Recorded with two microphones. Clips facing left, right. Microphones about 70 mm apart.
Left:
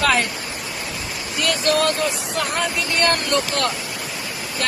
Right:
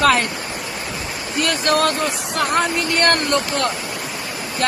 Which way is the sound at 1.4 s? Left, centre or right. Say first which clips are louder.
Right 1 dB; right.